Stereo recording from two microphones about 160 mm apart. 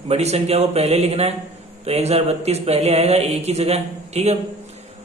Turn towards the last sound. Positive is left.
turn(degrees=-40)  # may be behind; listen again after turning